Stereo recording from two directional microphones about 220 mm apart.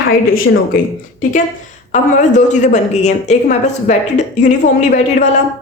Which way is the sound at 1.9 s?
35° left (ahead or behind).